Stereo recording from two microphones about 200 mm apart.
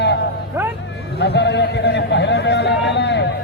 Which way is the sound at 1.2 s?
60° left (ahead or behind).